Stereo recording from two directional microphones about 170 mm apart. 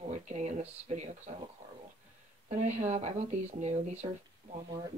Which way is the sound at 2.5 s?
40° right (ahead or behind).